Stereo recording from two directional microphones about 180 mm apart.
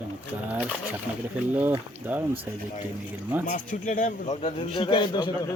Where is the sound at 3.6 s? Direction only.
45° left (ahead or behind); by 5.5 s 25° left (ahead or behind).